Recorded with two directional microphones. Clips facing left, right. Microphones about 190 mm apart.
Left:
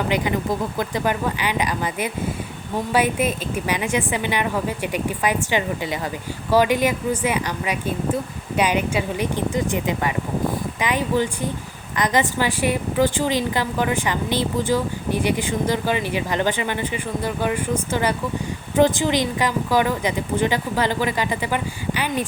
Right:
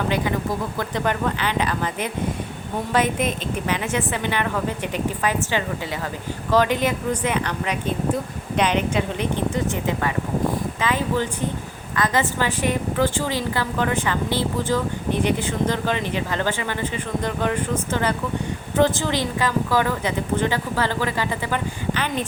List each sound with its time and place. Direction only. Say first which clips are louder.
0.8 s a woman's voice: left 1 dB; 10° left (ahead or behind)